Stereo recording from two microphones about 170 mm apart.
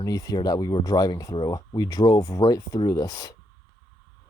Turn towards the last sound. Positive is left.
turn(degrees=20)  # may be behind; listen again after turning